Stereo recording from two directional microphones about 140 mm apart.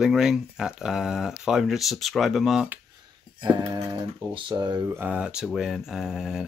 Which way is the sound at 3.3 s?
30° right (ahead or behind).